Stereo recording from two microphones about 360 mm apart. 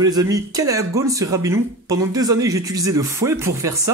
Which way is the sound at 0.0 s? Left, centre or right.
Centre.